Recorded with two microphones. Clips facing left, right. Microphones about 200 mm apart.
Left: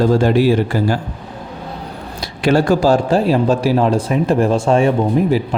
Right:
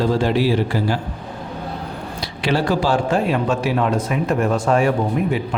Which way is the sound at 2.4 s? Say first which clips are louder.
Left 6 dB; 45° left (ahead or behind).